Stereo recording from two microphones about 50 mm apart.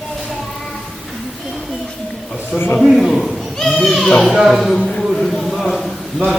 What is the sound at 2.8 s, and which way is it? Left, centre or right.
Speech, centre.